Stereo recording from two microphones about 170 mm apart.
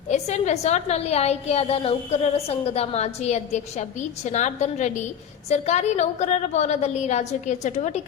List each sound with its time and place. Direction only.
0.1 s a woman's voice: 40° left (ahead or behind)